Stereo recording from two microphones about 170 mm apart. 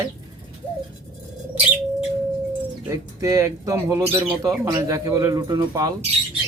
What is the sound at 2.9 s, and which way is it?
Speech, 20° right (ahead or behind).